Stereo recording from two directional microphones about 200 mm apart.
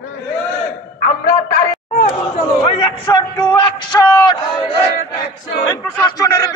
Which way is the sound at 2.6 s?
20° left (ahead or behind).